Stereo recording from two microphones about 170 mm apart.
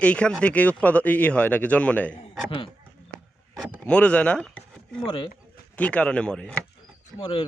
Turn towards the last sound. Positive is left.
turn(degrees=30)  # may be behind; listen again after turning